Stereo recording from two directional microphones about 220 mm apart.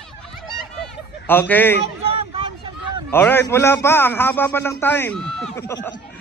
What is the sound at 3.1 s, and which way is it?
A man's voice, 10° left (ahead or behind).